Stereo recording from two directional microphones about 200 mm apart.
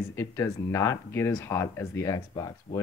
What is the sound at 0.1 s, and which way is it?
Speech, 15° left (ahead or behind).